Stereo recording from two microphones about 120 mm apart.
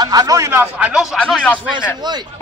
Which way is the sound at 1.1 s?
5° left (ahead or behind).